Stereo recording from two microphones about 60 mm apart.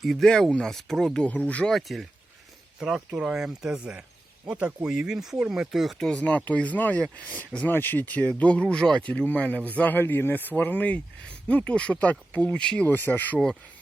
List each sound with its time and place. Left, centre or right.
0.0 s speech: centre
1.7 s speech: centre
6.1 s speech: left
10.0 s speech: left; by 12.9 s centre
12.9 s speech: left